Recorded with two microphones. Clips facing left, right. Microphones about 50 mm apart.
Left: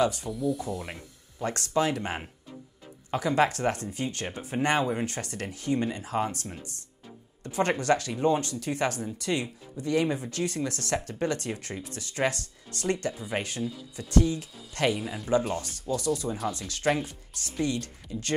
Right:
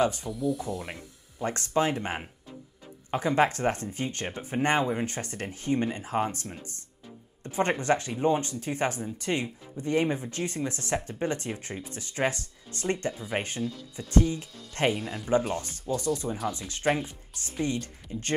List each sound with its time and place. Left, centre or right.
0.3 s speech: centre
1.4 s speech: right
13.6 s speech: centre
13.9 s speech: right
15.0 s speech: centre
15.6 s speech: right